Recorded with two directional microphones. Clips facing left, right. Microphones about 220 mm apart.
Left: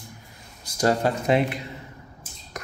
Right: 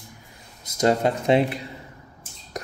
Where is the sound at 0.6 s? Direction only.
20° right (ahead or behind).